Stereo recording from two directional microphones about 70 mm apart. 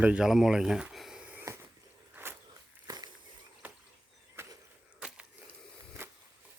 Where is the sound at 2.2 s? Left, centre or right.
Right.